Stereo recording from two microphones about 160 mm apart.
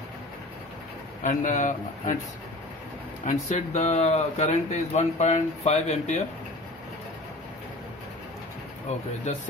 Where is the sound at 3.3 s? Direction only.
50° left (ahead or behind).